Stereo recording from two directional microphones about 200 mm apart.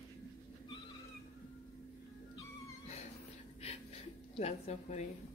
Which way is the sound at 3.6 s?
30° left (ahead or behind).